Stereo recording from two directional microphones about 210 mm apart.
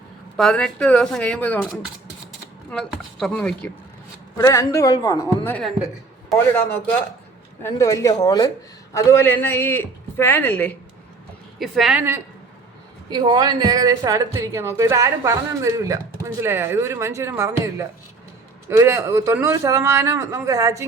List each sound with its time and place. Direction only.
0.3 s a man's voice: centre (ahead or behind)
11.6 s speech: centre (ahead or behind)
13.1 s a woman's voice: 20° right (ahead or behind)